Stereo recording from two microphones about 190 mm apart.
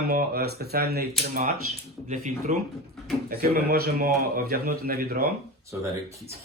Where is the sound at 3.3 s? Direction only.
50° right (ahead or behind).